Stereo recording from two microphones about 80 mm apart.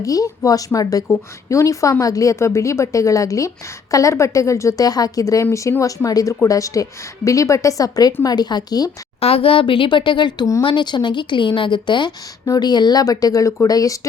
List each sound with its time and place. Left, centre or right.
0.0 s a woman's voice: left
4.8 s a woman's voice: left
9.6 s a woman's voice: left
12.5 s a woman's voice: left